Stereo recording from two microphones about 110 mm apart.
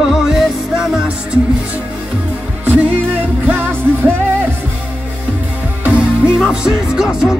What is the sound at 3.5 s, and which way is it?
Music, 15° right (ahead or behind).